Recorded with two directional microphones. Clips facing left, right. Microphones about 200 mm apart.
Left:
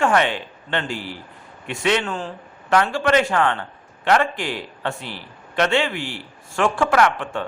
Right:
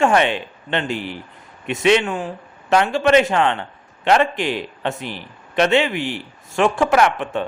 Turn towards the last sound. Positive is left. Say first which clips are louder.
# right 2 dB
turn(degrees=-20)  # may be behind; listen again after turning